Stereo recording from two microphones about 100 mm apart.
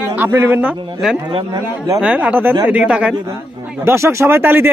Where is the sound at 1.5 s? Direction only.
35° right (ahead or behind).